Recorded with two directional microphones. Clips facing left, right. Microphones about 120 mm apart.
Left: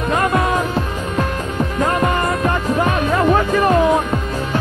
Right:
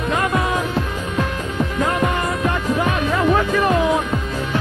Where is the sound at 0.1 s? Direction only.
50° left (ahead or behind).